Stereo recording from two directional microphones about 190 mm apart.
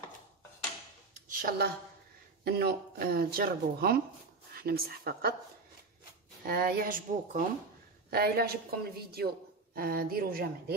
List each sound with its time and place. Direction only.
1.3 s a woman's voice: 50° right (ahead or behind)
6.4 s a woman's voice: 50° right (ahead or behind)